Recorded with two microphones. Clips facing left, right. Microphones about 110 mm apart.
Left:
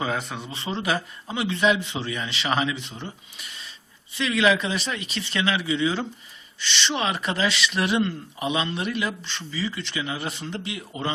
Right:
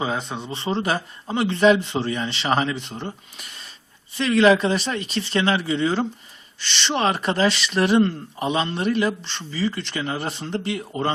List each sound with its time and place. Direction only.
0.0 s speech: 20° right (ahead or behind); by 11.1 s 45° right (ahead or behind)